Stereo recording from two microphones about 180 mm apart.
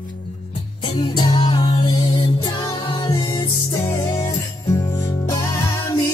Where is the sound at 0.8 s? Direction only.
25° left (ahead or behind).